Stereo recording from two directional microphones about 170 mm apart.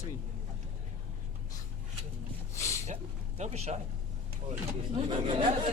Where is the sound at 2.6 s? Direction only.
15° left (ahead or behind).